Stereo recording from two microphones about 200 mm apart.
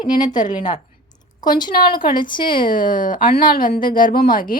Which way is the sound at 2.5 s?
45° left (ahead or behind).